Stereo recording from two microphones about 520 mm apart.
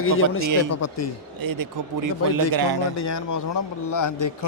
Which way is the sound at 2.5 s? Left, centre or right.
Right.